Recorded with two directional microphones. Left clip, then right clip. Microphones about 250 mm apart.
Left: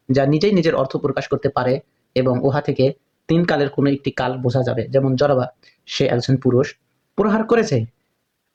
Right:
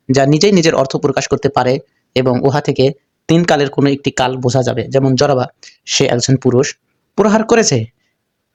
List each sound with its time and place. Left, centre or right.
0.1 s speech: right